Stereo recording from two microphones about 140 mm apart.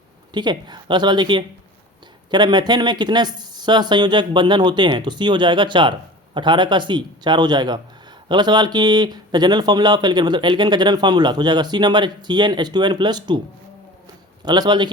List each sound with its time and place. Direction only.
0.3 s speech: 30° right (ahead or behind)
14.4 s speech: 30° right (ahead or behind)